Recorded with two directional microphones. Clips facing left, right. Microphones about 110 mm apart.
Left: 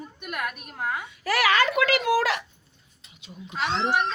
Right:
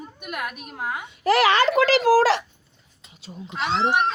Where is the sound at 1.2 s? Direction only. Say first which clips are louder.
Right 5 dB; 30° right (ahead or behind).